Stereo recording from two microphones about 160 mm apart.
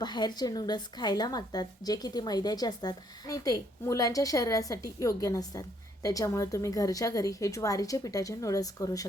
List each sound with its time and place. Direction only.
0.0 s speech: 25° left (ahead or behind)